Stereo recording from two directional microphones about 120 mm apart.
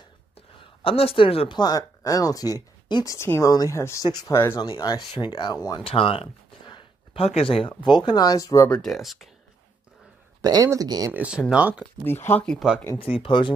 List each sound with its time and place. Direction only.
0.6 s speech: 50° left (ahead or behind)
1.6 s speech: 30° left (ahead or behind)
4.6 s speech: 35° left (ahead or behind)
5.9 s speech: 50° left (ahead or behind)
7.8 s speech: 40° left (ahead or behind)
8.6 s speech: 5° left (ahead or behind)
10.4 s speech: 30° right (ahead or behind)
11.1 s speech: 10° right (ahead or behind)
12.0 s speech: 20° left (ahead or behind)
12.4 s speech: centre (ahead or behind)
13.0 s speech: 50° left (ahead or behind)